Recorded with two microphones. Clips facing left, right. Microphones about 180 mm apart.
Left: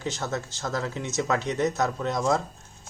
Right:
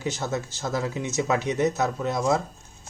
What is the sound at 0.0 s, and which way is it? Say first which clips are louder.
Speech: right 2 dB; 10° right (ahead or behind).